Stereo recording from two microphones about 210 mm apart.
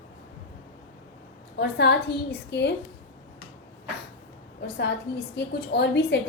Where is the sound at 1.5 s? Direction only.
50° left (ahead or behind).